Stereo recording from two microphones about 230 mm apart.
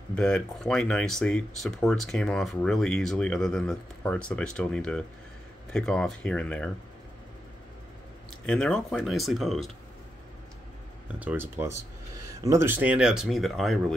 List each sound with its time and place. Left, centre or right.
0.1 s speech: centre
8.5 s speech: centre
11.1 s speech: centre